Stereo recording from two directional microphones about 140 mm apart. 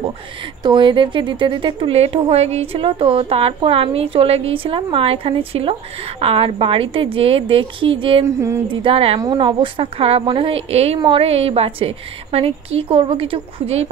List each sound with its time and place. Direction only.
0.7 s speech: 35° right (ahead or behind)
8.4 s a sound: 20° right (ahead or behind)
8.6 s speech: 40° right (ahead or behind)
9.2 s a woman's voice: 30° right (ahead or behind)